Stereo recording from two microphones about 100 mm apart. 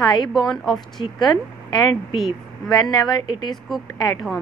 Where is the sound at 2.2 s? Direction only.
Centre (ahead or behind).